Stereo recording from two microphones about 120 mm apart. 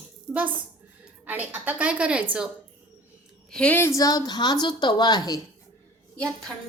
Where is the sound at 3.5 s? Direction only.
10° left (ahead or behind); by 5.4 s 35° left (ahead or behind).